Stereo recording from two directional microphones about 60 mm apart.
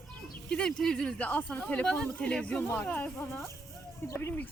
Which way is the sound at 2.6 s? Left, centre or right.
Left.